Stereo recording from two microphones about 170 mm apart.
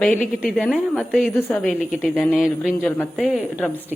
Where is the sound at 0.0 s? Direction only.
5° left (ahead or behind).